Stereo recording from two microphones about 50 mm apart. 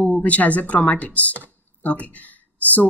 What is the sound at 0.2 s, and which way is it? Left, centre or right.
A woman's voice, left.